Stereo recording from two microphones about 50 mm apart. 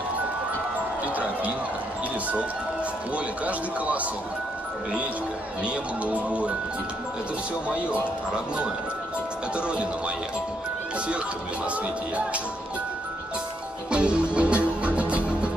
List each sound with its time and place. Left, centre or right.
1.0 s basketball bounce: right
3.4 s speech: right
5.6 s speech: right
9.6 s speech: right
13.8 s music: right